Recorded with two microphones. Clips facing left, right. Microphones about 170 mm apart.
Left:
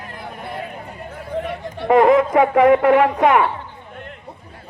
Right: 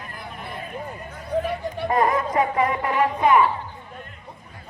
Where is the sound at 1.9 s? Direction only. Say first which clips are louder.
Left 9 dB; 70° left (ahead or behind).